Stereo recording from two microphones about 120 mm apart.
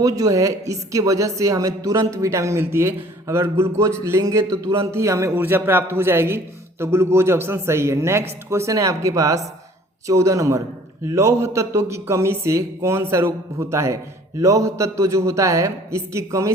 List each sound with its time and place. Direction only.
0.0 s a man's voice: 30° right (ahead or behind)